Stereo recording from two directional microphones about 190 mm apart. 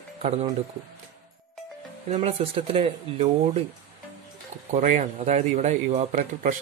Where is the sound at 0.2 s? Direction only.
35° right (ahead or behind).